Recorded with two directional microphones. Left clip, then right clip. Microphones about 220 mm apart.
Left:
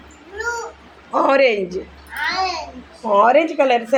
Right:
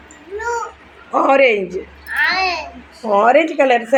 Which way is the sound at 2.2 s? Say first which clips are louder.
Right 3 dB; 20° right (ahead or behind).